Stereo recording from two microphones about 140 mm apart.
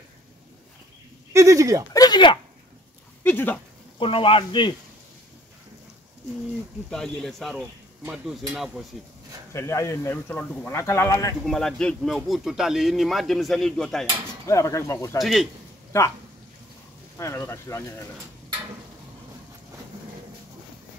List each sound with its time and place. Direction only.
1.3 s speech: 20° right (ahead or behind)
2.0 s speech: 30° left (ahead or behind)
3.3 s speech: 15° left (ahead or behind)
4.0 s speech: 40° left (ahead or behind)
6.9 s speech: 5° left (ahead or behind)
9.5 s speech: 20° left (ahead or behind)
11.4 s speech: 5° left (ahead or behind)
14.4 s speech: 20° left (ahead or behind)
15.1 s speech: centre (ahead or behind)
15.9 s speech: 20° left (ahead or behind)
17.2 s speech: 20° left (ahead or behind)